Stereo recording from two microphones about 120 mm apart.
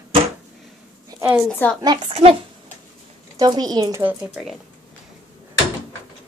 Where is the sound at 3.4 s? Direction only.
35° right (ahead or behind).